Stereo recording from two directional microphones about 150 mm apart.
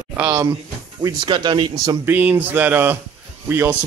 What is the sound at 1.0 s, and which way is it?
Speech, 30° right (ahead or behind).